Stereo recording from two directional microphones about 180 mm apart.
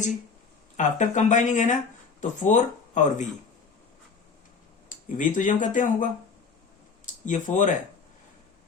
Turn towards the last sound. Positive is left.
turn(degrees=45)  # may be behind; listen again after turning